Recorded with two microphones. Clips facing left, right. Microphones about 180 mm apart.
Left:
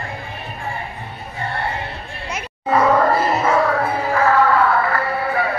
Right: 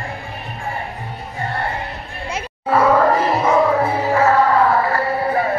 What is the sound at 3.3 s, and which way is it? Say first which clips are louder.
Music: right 1 dB; centre (ahead or behind).